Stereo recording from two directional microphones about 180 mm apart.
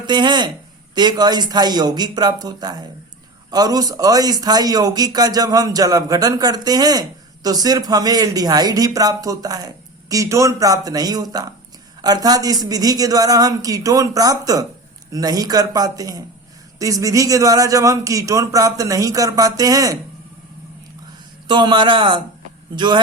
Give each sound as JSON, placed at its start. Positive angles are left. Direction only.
{"t": 0.0, "sound": "a man's voice", "side_deg": -25}
{"t": 21.4, "sound": "a man's voice", "side_deg": -25}